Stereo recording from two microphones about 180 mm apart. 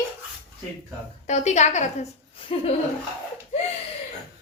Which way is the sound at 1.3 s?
40° left (ahead or behind).